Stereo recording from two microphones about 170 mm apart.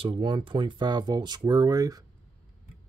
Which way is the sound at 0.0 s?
30° right (ahead or behind).